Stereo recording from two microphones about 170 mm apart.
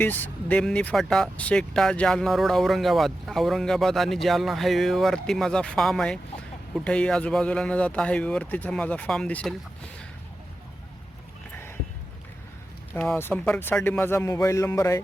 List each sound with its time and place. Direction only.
0.0 s speech: 10° left (ahead or behind)
13.1 s speech: 15° left (ahead or behind)